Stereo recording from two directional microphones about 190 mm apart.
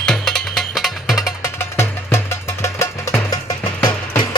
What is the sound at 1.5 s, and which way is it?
Music, 10° left (ahead or behind).